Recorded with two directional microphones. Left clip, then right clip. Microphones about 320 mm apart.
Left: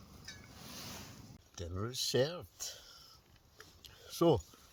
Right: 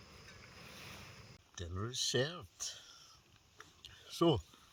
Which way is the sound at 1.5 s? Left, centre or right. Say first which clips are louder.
Left 1 dB; centre.